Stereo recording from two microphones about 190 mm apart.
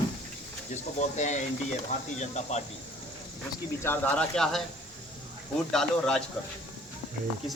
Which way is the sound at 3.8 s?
10° left (ahead or behind).